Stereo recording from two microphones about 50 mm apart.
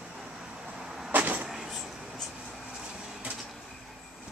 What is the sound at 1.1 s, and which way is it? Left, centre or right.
Vehicle, right.